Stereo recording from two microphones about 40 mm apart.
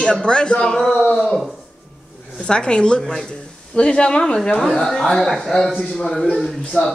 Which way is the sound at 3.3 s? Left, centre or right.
Left.